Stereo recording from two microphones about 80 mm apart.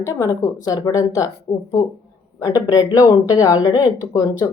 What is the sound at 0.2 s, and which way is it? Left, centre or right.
Speech, left.